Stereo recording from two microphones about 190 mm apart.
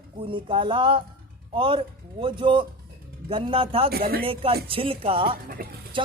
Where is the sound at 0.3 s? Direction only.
25° right (ahead or behind).